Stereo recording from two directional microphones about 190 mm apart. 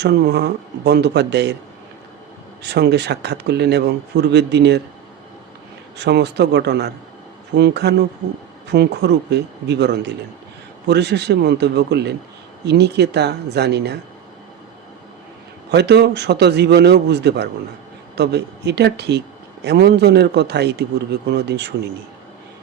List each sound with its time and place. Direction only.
0.0 s speech: 60° right (ahead or behind)
2.6 s speech: 60° right (ahead or behind)
6.0 s speech: 60° right (ahead or behind)
15.7 s speech: 60° right (ahead or behind)